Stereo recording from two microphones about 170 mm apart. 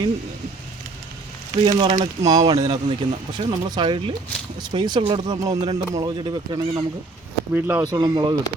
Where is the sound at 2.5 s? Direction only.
40° right (ahead or behind).